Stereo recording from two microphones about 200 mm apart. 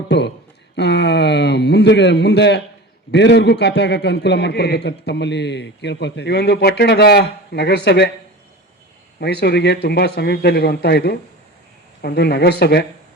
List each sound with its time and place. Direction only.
0.1 s a man's voice: 55° left (ahead or behind)
9.2 s speech: 55° left (ahead or behind)